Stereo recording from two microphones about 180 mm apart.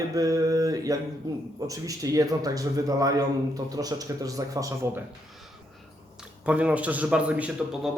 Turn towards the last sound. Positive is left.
turn(degrees=-5)  # may be behind; listen again after turning